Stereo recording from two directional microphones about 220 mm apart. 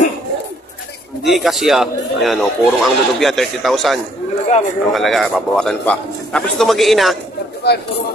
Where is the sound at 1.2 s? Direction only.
Centre (ahead or behind).